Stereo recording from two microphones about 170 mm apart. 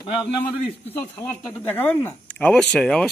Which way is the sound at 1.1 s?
10° left (ahead or behind).